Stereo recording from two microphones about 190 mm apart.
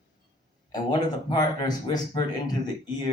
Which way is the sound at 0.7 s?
20° left (ahead or behind).